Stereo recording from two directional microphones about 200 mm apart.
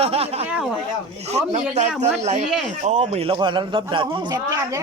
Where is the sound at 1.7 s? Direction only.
35° right (ahead or behind).